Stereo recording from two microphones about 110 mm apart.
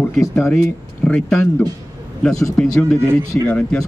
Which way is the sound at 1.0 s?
10° left (ahead or behind).